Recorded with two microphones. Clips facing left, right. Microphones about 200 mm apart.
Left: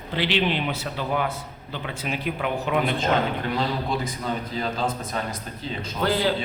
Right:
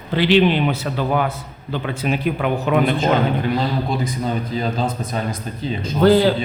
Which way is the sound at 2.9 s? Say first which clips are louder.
Right 5 dB; 10° right (ahead or behind).